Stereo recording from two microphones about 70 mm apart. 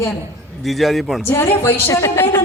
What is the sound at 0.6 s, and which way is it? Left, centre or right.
Speech, centre.